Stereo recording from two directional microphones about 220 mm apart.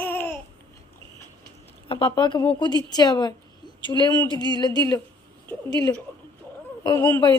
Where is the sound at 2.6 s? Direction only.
20° left (ahead or behind).